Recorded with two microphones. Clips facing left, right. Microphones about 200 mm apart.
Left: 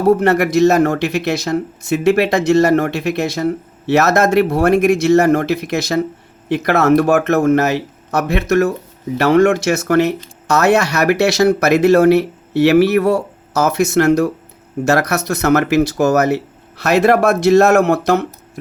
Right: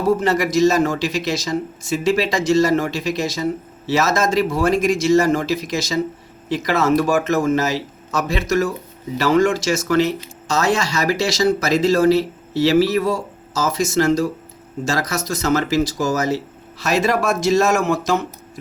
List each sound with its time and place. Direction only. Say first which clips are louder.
0.0 s speech: left 5 dB; 60° left (ahead or behind)